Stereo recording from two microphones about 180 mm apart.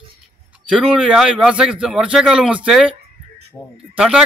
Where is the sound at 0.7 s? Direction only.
5° right (ahead or behind).